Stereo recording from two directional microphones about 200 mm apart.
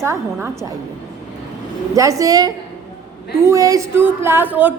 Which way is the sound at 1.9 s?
15° right (ahead or behind).